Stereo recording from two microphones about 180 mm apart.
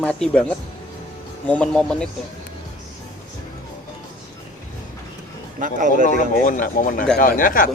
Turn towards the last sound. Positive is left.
turn(degrees=50)  # may be behind; listen again after turning